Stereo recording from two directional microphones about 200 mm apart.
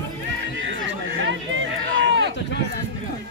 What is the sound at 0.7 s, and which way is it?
Run, 65° right (ahead or behind).